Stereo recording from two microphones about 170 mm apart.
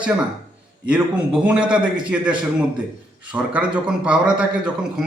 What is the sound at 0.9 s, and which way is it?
A man's voice, 5° right (ahead or behind).